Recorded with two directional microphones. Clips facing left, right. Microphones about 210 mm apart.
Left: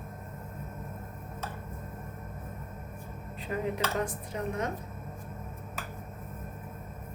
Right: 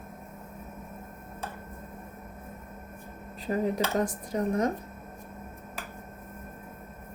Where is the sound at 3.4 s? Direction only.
40° right (ahead or behind).